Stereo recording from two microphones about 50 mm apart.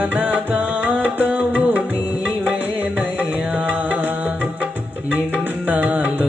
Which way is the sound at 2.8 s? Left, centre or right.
Right.